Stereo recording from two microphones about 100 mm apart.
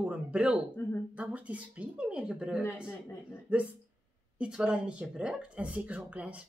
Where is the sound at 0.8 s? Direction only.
20° left (ahead or behind).